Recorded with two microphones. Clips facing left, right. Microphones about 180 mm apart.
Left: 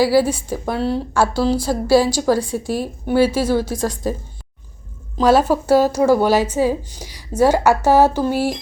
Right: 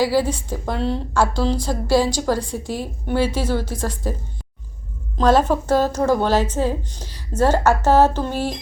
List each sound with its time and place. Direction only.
0.0 s a woman's voice: 10° left (ahead or behind)
5.1 s a woman's voice: 10° left (ahead or behind)